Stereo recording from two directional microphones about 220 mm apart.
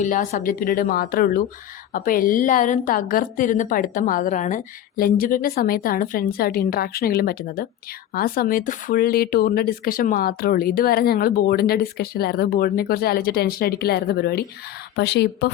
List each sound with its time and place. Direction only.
0.0 s a woman's voice: 35° left (ahead or behind)